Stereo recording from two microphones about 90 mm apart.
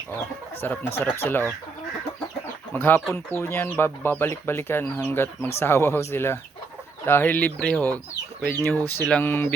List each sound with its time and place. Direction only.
0.6 s speech: 25° left (ahead or behind)
2.7 s speech: 20° left (ahead or behind)